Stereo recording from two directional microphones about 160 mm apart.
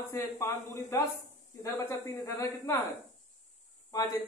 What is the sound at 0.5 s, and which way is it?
Speech, 50° left (ahead or behind).